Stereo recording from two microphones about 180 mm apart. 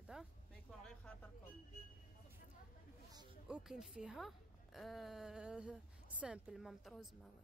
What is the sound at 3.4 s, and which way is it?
A woman's voice, 5° right (ahead or behind).